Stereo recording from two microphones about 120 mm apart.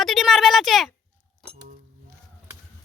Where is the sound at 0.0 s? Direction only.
Centre (ahead or behind).